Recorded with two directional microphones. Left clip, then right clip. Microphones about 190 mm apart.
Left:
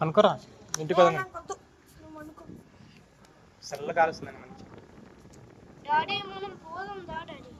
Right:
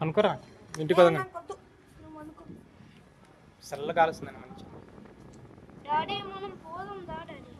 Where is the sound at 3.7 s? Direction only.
15° right (ahead or behind).